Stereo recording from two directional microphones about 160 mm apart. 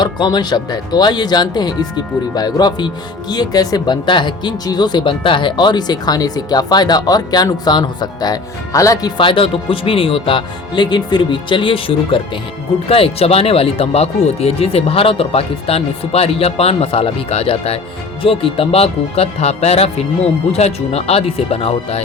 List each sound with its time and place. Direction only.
0.0 s speech: 25° left (ahead or behind)